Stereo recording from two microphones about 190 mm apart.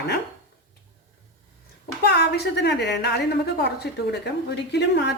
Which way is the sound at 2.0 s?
65° left (ahead or behind).